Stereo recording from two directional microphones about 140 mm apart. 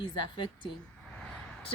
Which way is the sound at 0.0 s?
35° left (ahead or behind).